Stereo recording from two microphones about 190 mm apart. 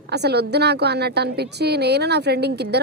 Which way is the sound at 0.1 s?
60° right (ahead or behind).